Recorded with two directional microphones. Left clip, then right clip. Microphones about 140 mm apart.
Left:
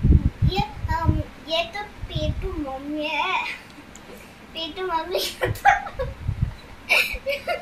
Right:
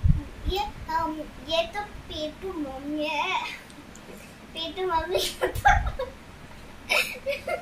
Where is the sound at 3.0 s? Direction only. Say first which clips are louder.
Left 2 dB; 15° right (ahead or behind).